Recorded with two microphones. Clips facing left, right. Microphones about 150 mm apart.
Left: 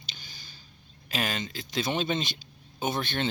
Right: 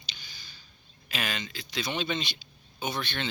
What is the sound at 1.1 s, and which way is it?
Speech, 40° left (ahead or behind).